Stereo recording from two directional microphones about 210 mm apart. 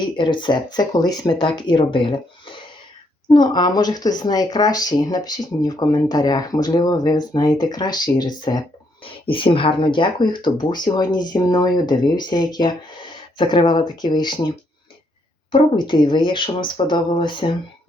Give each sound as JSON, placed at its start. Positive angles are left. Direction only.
{"t": 0.0, "sound": "speech", "side_deg": 20}
{"t": 3.2, "sound": "speech", "side_deg": 20}
{"t": 15.5, "sound": "speech", "side_deg": 20}